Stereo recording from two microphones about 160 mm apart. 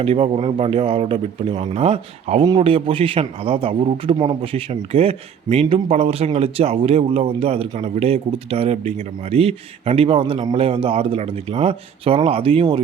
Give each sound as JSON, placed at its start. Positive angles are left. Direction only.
{"t": 0.0, "sound": "a man's voice", "side_deg": -35}